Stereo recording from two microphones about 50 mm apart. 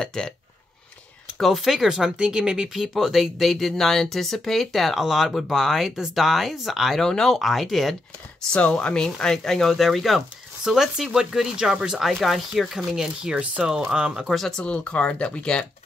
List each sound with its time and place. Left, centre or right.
0.0 s speech: centre
1.4 s speech: centre
7.1 s speech: centre
8.5 s speech: left; by 12.0 s centre
12.2 s speech: centre
12.9 s speech: centre
14.2 s speech: centre
14.6 s speech: left